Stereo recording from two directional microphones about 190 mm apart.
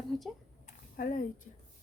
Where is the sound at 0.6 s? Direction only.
45° left (ahead or behind).